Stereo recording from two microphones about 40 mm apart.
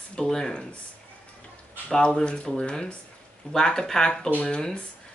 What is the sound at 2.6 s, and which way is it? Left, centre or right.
Speech, left.